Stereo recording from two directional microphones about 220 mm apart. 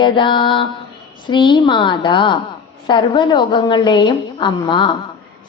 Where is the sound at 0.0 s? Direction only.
20° left (ahead or behind).